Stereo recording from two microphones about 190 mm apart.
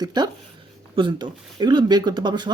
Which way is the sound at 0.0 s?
20° right (ahead or behind).